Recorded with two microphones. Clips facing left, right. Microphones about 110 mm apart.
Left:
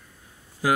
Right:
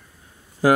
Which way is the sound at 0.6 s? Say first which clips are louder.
Right 6 dB; 45° right (ahead or behind).